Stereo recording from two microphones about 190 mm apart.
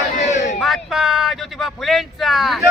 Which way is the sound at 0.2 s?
35° left (ahead or behind).